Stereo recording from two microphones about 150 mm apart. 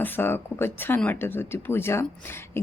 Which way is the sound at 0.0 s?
15° left (ahead or behind).